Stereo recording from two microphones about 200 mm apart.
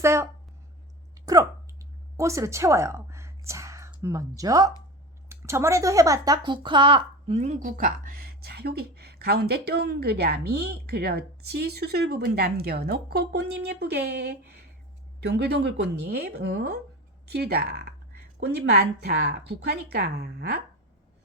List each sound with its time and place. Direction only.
0.0 s speech: 15° right (ahead or behind)
1.1 s a sound: 20° right (ahead or behind)
5.3 s a woman's voice: 15° right (ahead or behind); by 20.6 s 50° right (ahead or behind)